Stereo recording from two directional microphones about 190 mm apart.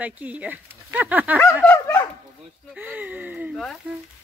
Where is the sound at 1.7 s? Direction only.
15° left (ahead or behind).